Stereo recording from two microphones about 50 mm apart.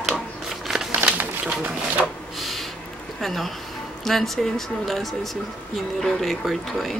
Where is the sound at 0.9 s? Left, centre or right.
Right.